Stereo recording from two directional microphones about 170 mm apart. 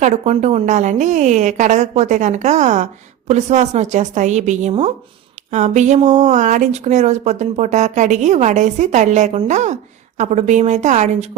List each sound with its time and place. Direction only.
0.0 s a woman's voice: 40° right (ahead or behind)